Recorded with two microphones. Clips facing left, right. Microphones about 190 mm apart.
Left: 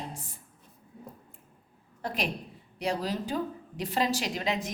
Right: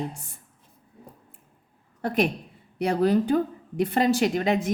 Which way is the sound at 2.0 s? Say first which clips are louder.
Right 9 dB; 55° right (ahead or behind).